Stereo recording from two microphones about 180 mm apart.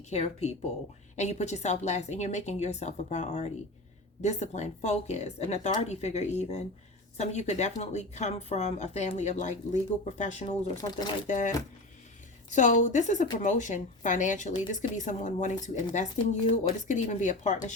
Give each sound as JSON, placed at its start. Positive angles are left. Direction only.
{"t": 0.1, "sound": "speech", "side_deg": 35}
{"t": 10.8, "sound": "speech", "side_deg": 25}
{"t": 11.3, "sound": "a woman's voice", "side_deg": 45}